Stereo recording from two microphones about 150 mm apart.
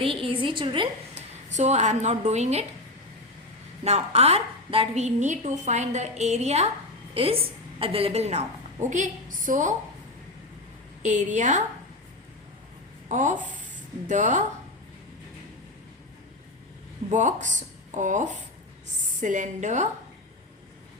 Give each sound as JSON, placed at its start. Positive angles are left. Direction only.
{"t": 0.0, "sound": "a woman's voice", "side_deg": -35}
{"t": 1.5, "sound": "a woman's voice", "side_deg": -50}
{"t": 3.8, "sound": "a woman's voice", "side_deg": -45}
{"t": 11.0, "sound": "a woman's voice", "side_deg": -55}
{"t": 13.1, "sound": "speech", "side_deg": -55}
{"t": 17.1, "sound": "a woman's voice", "side_deg": -55}